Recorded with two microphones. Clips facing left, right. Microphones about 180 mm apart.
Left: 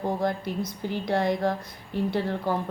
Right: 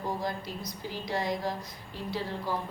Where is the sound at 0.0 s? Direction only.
60° left (ahead or behind).